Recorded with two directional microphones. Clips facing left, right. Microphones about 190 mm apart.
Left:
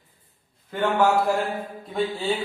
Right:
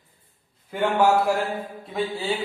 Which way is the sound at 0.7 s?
10° right (ahead or behind).